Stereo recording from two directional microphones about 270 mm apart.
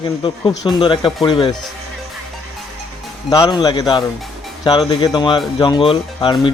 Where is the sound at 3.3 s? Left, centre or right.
Centre.